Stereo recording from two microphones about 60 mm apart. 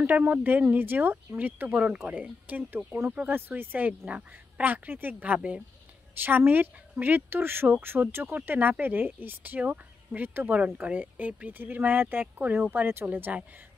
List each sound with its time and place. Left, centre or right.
0.0 s speech: right
6.2 s speech: right
8.5 s speech: right